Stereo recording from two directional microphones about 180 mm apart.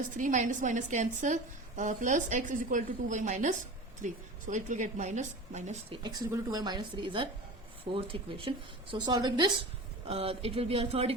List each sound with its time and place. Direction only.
0.2 s a woman's voice: 45° right (ahead or behind)
6.0 s a woman's voice: 20° right (ahead or behind)